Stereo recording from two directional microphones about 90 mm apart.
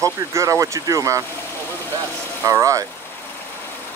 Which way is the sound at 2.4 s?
35° right (ahead or behind).